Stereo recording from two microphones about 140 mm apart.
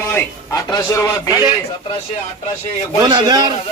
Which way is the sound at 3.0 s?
35° right (ahead or behind).